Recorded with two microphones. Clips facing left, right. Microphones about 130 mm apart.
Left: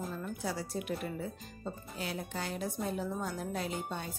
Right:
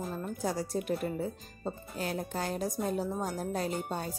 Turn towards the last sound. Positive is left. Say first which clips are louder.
# right 4 dB
turn(degrees=-40)  # may be behind; listen again after turning